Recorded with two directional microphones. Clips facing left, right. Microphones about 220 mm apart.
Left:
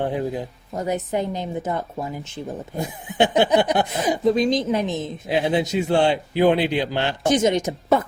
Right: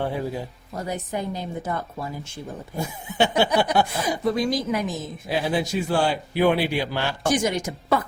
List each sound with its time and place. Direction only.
0.8 s a woman's voice: 20° left (ahead or behind)